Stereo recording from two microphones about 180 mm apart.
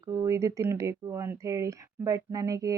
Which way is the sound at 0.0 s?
15° right (ahead or behind).